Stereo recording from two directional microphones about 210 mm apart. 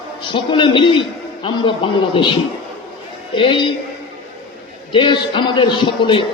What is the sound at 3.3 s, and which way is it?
Speech, 25° left (ahead or behind).